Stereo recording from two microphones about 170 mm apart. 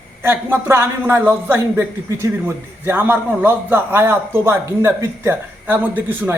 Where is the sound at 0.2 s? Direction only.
15° right (ahead or behind).